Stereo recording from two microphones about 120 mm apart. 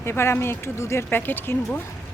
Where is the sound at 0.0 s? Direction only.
20° left (ahead or behind).